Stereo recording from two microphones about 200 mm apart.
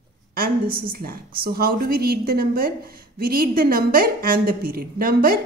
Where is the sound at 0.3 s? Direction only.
45° right (ahead or behind).